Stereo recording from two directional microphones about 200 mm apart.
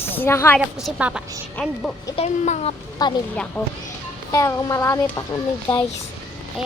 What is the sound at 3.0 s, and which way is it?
Speech, 20° left (ahead or behind).